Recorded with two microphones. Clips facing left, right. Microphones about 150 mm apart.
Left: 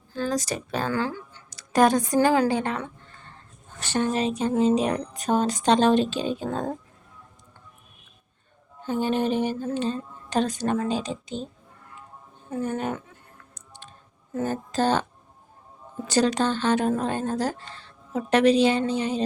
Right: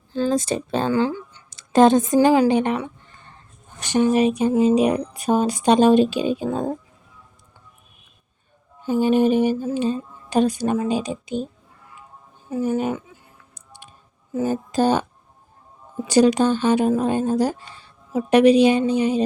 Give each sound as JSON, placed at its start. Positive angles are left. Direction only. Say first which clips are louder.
{"t": 0.1, "sound": "speech", "louder": "right 6 dB", "side_deg": -25}
{"t": 2.1, "sound": "a woman's voice", "louder": "right 5 dB", "side_deg": -15}
{"t": 8.8, "sound": "a woman's voice", "louder": "right 7 dB", "side_deg": -10}
{"t": 12.5, "sound": "a woman's voice", "louder": "right 6 dB", "side_deg": -5}
{"t": 14.3, "sound": "a woman's voice", "louder": "right 5 dB", "side_deg": -10}
{"t": 16.0, "sound": "a woman's voice", "louder": "right 6 dB", "side_deg": -10}